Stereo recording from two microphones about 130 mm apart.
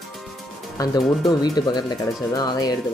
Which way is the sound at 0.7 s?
30° left (ahead or behind).